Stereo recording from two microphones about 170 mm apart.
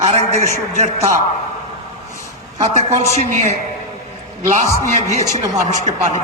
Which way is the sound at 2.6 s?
40° right (ahead or behind).